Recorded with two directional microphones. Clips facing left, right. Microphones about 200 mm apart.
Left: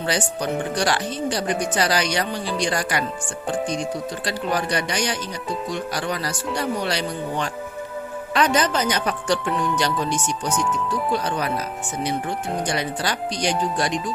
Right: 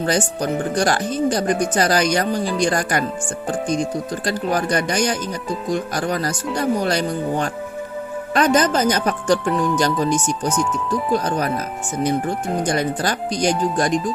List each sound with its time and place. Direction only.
0.0 s speech: 45° right (ahead or behind)
4.3 s speech: 45° right (ahead or behind)
12.6 s speech: 45° right (ahead or behind)